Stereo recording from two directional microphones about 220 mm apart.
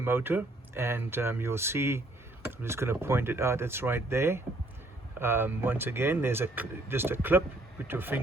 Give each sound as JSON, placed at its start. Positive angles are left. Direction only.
{"t": 0.0, "sound": "speech", "side_deg": -10}